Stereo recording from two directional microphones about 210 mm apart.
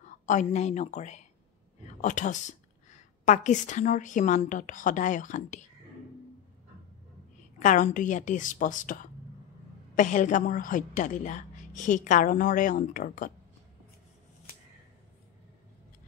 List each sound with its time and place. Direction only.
0.0 s a woman's voice: 35° left (ahead or behind)
7.5 s a woman's voice: 35° left (ahead or behind)